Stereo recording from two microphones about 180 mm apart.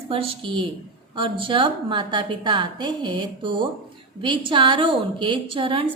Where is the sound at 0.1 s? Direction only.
30° right (ahead or behind).